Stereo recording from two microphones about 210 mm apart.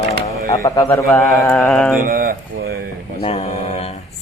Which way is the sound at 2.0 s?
45° right (ahead or behind).